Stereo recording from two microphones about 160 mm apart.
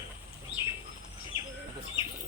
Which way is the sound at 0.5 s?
35° right (ahead or behind).